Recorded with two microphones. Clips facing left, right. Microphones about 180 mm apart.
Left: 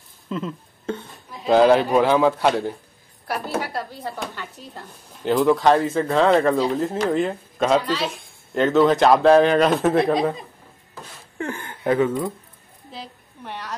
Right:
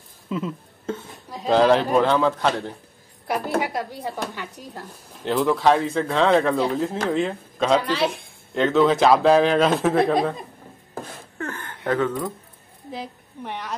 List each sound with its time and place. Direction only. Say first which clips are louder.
0.3 s speech: right 1 dB; 5° right (ahead or behind); by 2.5 s 10° left (ahead or behind)
3.4 s a woman's voice: right 2 dB; 15° right (ahead or behind)
5.2 s speech: left 2 dB; centre (ahead or behind)
7.8 s speech: right 2 dB; 60° right (ahead or behind)
8.5 s speech: left 1 dB; centre (ahead or behind)
11.3 s a sound: left 3 dB; 10° left (ahead or behind)
12.9 s a woman's voice: right 4 dB; 15° right (ahead or behind)